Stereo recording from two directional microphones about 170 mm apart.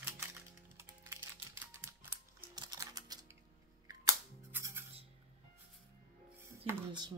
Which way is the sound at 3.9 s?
20° right (ahead or behind).